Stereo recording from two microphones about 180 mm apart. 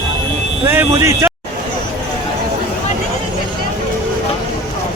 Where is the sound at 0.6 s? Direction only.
15° right (ahead or behind).